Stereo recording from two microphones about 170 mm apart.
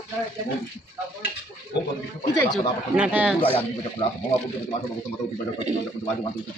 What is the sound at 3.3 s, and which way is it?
Speech, 30° left (ahead or behind).